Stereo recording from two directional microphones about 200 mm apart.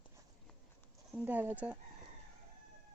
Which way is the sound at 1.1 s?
10° right (ahead or behind).